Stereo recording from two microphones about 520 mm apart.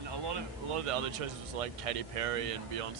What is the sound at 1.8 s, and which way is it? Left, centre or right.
Speech, right.